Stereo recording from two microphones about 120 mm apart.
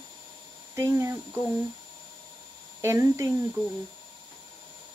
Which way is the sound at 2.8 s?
25° right (ahead or behind).